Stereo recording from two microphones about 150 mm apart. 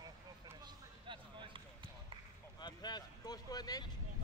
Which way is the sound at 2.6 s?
30° left (ahead or behind).